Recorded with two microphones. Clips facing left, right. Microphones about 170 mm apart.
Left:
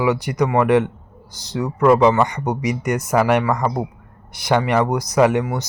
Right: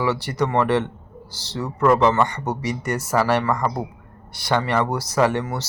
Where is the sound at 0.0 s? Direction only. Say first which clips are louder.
Left 3 dB; 15° left (ahead or behind).